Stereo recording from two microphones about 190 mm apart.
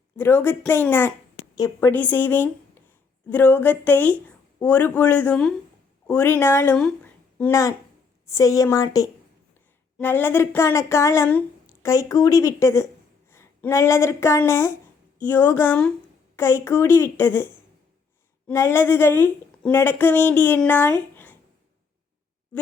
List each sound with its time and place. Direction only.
0.2 s speech: 10° left (ahead or behind)